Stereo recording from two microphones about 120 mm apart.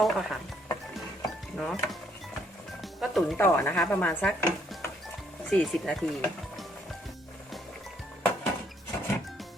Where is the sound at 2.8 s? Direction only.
Centre (ahead or behind).